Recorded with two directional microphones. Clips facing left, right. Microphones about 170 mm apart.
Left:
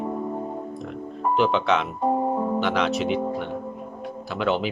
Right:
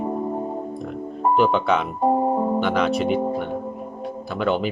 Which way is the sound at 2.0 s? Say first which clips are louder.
Right 4 dB; 30° right (ahead or behind).